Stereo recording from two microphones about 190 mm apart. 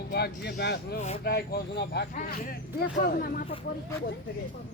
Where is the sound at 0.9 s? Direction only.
35° left (ahead or behind).